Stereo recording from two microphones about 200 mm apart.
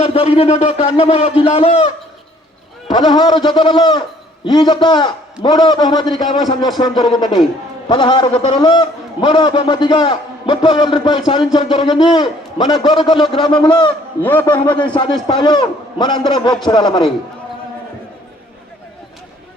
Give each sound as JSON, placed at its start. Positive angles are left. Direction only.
{"t": 0.0, "sound": "a man's voice", "side_deg": 30}
{"t": 14.2, "sound": "a man's voice", "side_deg": 10}
{"t": 14.4, "sound": "a man's voice", "side_deg": 20}